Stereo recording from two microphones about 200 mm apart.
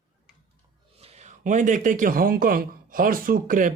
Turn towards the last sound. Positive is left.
turn(degrees=-45)  # may be behind; listen again after turning